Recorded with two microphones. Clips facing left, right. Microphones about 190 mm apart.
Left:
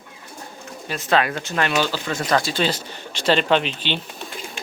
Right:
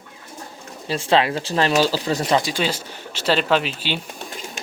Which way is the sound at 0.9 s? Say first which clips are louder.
Right 2 dB; 30° right (ahead or behind).